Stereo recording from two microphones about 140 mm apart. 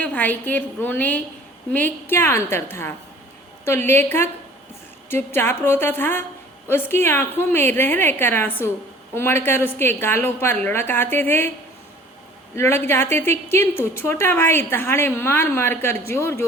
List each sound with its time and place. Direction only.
0.0 s a woman's voice: 10° left (ahead or behind)
12.5 s a woman's voice: 15° left (ahead or behind)